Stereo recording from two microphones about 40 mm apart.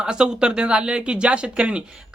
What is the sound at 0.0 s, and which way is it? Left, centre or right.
Speech, right.